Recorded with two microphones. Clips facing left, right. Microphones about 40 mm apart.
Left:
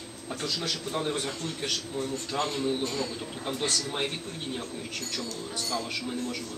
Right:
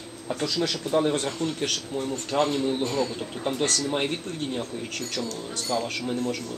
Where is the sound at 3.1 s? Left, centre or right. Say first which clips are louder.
Right 5 dB; right.